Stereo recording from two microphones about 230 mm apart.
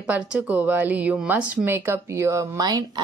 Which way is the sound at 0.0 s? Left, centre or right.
Centre.